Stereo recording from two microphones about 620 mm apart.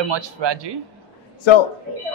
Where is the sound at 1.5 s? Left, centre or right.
Left.